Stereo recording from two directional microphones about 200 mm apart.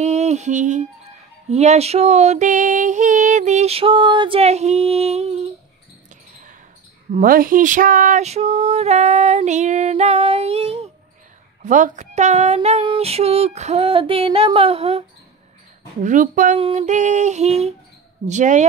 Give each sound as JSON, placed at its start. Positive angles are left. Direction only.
{"t": 0.0, "sound": "music", "side_deg": -35}
{"t": 1.5, "sound": "female singing", "side_deg": -35}
{"t": 7.1, "sound": "female singing", "side_deg": -40}